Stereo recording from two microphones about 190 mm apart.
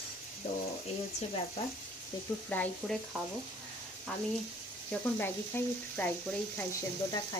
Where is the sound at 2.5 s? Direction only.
5° left (ahead or behind).